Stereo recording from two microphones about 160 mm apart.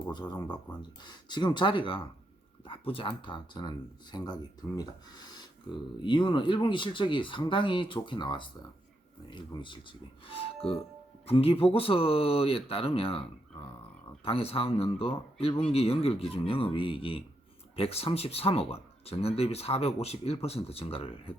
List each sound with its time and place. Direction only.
0.1 s speech: 25° left (ahead or behind)